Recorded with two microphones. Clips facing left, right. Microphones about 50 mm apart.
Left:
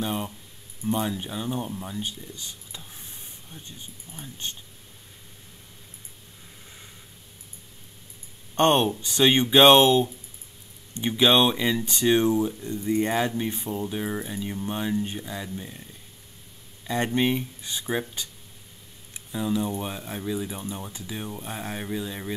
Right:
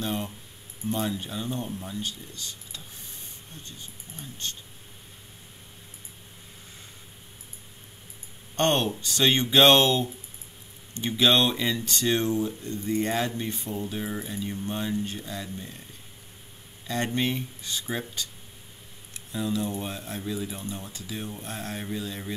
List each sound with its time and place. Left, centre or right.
0.0 s speech: centre
4.2 s speech: centre
8.5 s speech: centre
16.8 s speech: centre
19.3 s speech: centre